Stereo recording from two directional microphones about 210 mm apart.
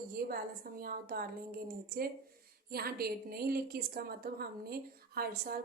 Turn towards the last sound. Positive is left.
turn(degrees=-45)  # may be behind; listen again after turning